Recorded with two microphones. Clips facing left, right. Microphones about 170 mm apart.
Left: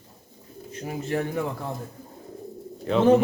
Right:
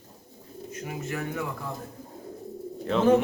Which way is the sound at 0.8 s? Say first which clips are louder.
Left 6 dB; 30° left (ahead or behind).